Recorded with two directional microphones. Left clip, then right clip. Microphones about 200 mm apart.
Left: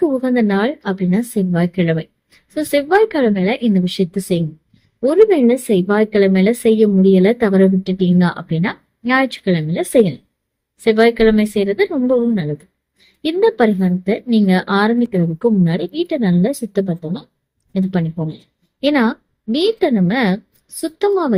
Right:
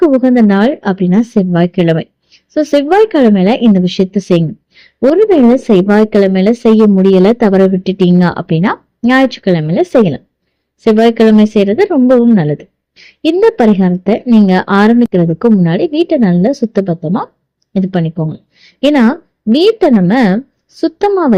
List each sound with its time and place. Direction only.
0.0 s a woman's voice: 30° right (ahead or behind)
14.2 s speech: centre (ahead or behind)
14.4 s a woman's voice: 35° right (ahead or behind)
18.9 s a woman's voice: 30° right (ahead or behind)